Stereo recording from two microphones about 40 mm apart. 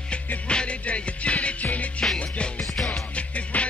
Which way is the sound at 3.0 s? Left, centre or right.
Left.